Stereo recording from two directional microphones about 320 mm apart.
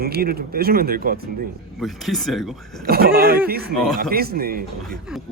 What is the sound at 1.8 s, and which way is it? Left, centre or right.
Speech, centre.